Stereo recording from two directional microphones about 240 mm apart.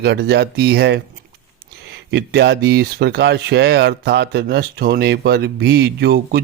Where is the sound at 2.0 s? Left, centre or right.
Right.